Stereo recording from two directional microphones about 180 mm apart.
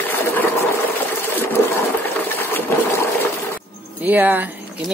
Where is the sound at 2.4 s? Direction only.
10° left (ahead or behind).